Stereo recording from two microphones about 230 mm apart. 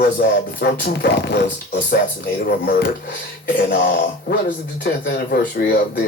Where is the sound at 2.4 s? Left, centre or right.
Left.